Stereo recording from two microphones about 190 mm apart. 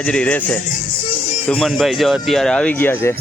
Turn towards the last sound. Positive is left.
turn(degrees=10)  # may be behind; listen again after turning